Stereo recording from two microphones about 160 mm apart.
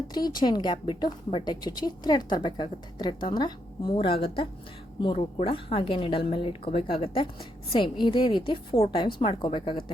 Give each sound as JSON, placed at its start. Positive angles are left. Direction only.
{"t": 0.1, "sound": "a woman's voice", "side_deg": 25}